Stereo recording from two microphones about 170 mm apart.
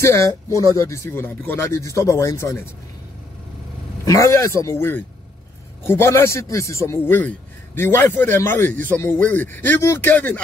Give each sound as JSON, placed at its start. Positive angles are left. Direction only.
{"t": 0.0, "sound": "speech", "side_deg": 15}
{"t": 4.0, "sound": "speech", "side_deg": 20}